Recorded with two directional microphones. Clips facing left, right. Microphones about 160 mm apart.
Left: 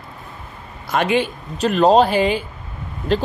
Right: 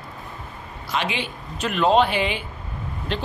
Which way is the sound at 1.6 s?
35° left (ahead or behind).